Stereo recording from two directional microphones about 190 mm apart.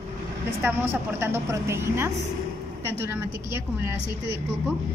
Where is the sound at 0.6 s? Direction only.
10° right (ahead or behind).